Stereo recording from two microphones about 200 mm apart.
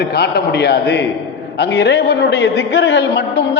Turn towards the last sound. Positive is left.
turn(degrees=60)  # may be behind; listen again after turning